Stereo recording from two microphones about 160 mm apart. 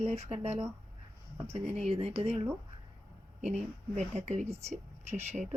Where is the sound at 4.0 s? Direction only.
45° right (ahead or behind).